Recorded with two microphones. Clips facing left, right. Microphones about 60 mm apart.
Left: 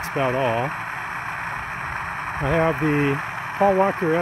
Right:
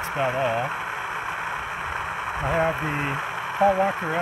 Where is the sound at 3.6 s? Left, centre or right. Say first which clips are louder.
Left 1 dB; left.